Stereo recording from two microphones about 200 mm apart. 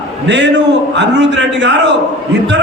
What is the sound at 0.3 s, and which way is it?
A man's voice, 60° right (ahead or behind).